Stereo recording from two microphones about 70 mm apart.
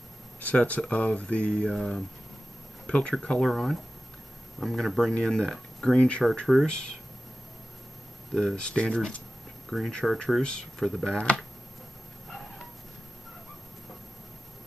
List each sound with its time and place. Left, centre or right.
0.4 s speech: centre
8.3 s speech: centre
8.5 s speech: centre
9.7 s speech: centre